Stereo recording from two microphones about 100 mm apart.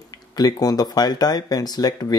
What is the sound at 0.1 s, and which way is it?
Speech, 40° left (ahead or behind).